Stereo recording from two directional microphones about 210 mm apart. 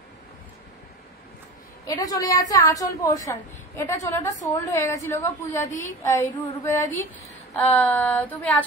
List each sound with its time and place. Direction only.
1.9 s a woman's voice: 15° left (ahead or behind)